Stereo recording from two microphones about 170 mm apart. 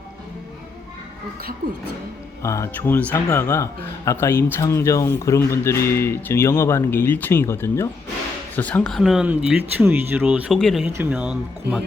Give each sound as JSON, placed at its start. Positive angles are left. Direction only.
{"t": 2.4, "sound": "a man's voice", "side_deg": 15}
{"t": 10.8, "sound": "speech", "side_deg": -10}